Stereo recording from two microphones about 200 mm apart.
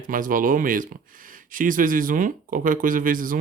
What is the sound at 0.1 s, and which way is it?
Speech, 45° right (ahead or behind).